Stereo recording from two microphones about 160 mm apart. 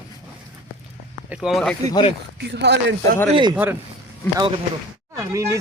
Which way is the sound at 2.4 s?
90° right.